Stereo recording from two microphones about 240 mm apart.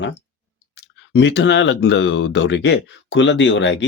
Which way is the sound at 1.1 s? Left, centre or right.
Left.